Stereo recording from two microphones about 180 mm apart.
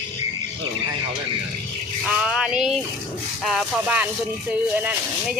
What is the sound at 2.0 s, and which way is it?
Speech, 5° right (ahead or behind).